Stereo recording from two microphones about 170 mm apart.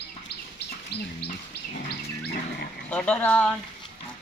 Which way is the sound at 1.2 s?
70° left (ahead or behind).